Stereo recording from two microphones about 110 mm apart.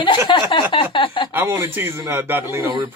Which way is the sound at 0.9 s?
50° left (ahead or behind).